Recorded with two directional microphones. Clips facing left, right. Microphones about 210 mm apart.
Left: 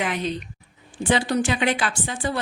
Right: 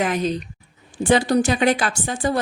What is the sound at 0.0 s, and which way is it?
A woman's voice, 40° right (ahead or behind).